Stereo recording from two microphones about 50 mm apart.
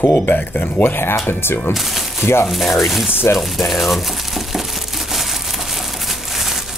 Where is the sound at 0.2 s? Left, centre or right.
Left.